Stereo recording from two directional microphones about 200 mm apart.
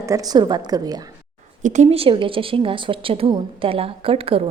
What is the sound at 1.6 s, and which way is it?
A woman's voice, 35° right (ahead or behind).